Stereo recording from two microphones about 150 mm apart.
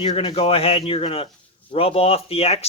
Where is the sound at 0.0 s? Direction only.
40° left (ahead or behind).